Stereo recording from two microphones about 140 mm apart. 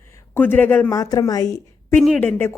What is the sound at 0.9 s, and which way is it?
A woman's voice, 25° left (ahead or behind).